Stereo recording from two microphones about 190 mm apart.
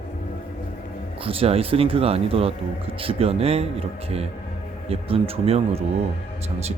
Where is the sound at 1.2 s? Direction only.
30° right (ahead or behind).